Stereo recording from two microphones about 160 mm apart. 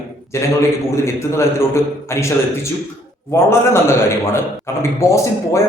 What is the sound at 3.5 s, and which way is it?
Speech, 15° left (ahead or behind).